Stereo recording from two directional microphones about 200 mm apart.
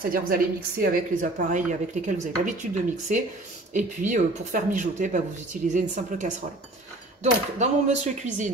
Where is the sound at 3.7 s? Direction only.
40° right (ahead or behind).